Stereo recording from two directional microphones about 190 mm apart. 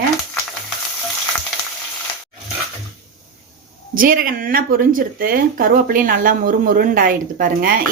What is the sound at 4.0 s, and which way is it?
Speech, 50° right (ahead or behind).